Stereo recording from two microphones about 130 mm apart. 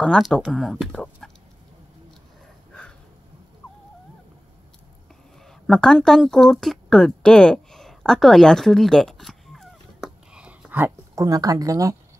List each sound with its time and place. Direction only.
0.0 s speech: 5° left (ahead or behind)
5.7 s a sound: 5° left (ahead or behind); by 10.9 s 10° right (ahead or behind)
11.1 s speech: 30° right (ahead or behind)